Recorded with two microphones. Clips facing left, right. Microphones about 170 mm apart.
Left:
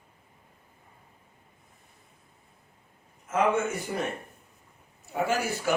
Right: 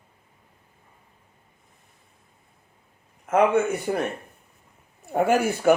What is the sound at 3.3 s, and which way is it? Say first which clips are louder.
Speech: right 6 dB; 60° right (ahead or behind).